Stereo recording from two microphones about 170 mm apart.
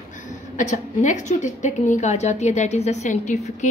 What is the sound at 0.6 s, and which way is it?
A woman's voice, 45° left (ahead or behind).